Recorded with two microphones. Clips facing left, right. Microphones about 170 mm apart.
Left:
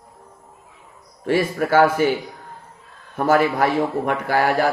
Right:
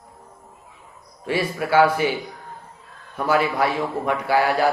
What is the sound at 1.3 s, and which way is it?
Speech, 50° left (ahead or behind).